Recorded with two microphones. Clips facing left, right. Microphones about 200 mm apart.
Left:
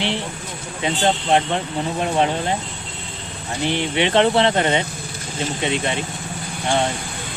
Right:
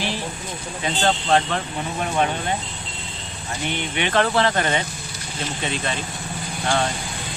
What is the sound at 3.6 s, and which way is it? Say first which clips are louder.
Speech: left 6 dB; 30° left (ahead or behind).